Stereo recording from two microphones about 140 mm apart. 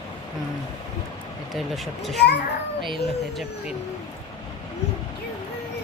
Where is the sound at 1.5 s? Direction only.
Centre (ahead or behind).